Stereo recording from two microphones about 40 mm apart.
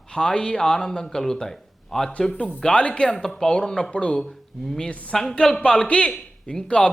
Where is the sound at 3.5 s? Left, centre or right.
Left.